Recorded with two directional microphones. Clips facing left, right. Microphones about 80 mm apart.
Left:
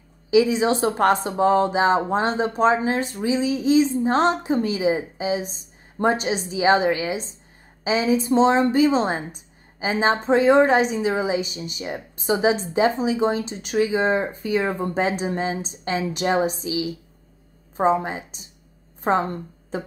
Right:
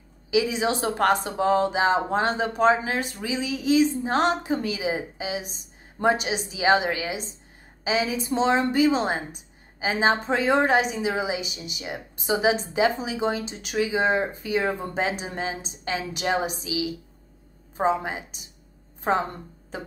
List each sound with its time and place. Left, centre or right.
0.3 s a woman's voice: left